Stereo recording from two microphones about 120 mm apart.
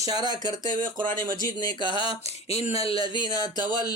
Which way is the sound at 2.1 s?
60° left (ahead or behind).